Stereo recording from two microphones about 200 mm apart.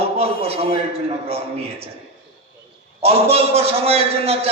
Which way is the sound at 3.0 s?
30° right (ahead or behind).